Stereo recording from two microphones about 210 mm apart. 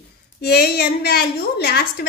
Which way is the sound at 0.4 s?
50° left (ahead or behind).